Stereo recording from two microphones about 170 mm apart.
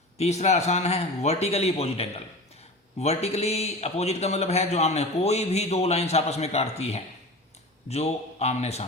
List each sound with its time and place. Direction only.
0.2 s speech: 40° left (ahead or behind)